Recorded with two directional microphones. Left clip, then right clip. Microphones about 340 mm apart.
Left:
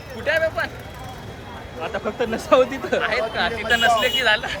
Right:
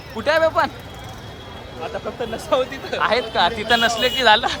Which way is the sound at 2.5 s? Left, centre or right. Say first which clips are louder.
Left 4 dB; left.